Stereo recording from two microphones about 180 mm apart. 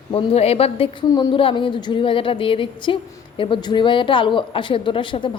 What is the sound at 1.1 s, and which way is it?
A woman's voice, 20° left (ahead or behind).